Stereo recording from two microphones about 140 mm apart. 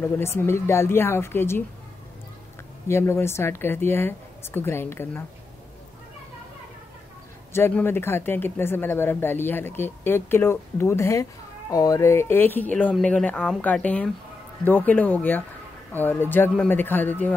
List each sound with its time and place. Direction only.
0.0 s speech: 20° left (ahead or behind)
2.9 s speech: 15° left (ahead or behind)
7.5 s speech: 15° left (ahead or behind)